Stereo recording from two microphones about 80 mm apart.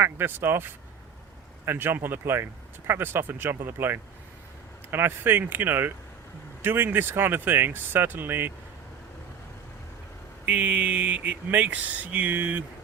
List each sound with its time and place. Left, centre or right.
0.0 s speech: right
10.4 s speech: centre